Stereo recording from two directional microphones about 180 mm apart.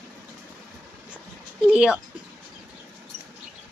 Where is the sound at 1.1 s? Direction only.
Centre (ahead or behind).